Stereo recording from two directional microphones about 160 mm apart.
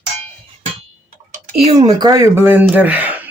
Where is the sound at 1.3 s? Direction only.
50° right (ahead or behind).